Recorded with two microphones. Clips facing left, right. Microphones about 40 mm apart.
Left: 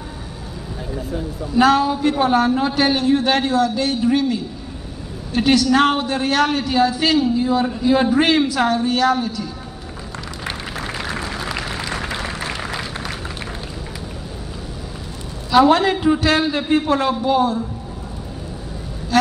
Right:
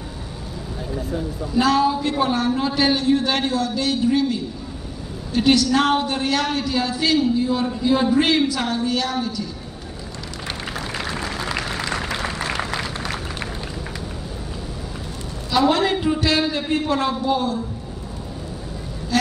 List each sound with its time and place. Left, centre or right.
1.5 s a man's voice: left
11.1 s a sound: centre
15.7 s a man's voice: left